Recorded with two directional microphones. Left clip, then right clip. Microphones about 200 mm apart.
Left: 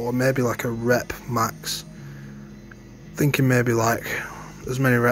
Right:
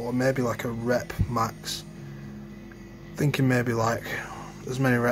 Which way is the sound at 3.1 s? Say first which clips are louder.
Left 4 dB; 15° left (ahead or behind).